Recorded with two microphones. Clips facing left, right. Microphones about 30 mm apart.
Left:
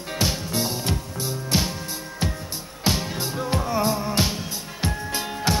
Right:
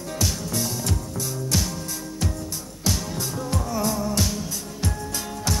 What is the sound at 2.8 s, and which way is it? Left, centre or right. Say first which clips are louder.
Music: left 3 dB; left.